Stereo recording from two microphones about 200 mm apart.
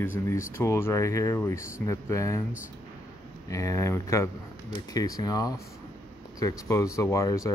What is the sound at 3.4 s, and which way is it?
Speech, 15° left (ahead or behind).